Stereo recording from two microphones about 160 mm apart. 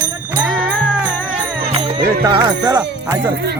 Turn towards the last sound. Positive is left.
turn(degrees=-90)